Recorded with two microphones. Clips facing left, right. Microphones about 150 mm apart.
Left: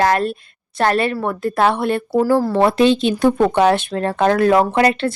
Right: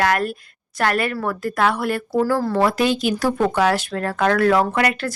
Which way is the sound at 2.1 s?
10° left (ahead or behind).